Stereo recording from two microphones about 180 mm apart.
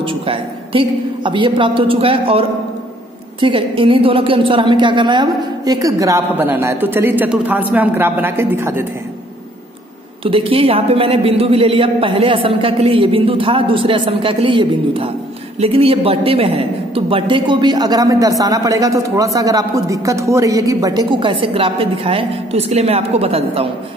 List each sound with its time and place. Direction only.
0.0 s a woman's voice: 30° right (ahead or behind); by 8.8 s 15° right (ahead or behind)
10.2 s a man's voice: 30° right (ahead or behind)